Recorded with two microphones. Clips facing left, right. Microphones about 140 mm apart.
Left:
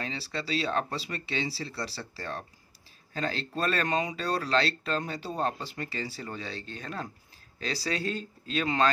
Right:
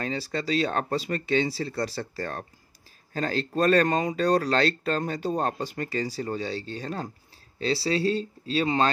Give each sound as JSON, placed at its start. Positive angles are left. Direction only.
{"t": 0.0, "sound": "speech", "side_deg": -45}